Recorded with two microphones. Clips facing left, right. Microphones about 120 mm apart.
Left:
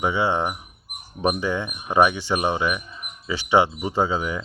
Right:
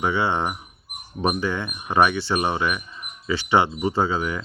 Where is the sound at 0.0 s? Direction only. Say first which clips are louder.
Left 1 dB; 15° left (ahead or behind).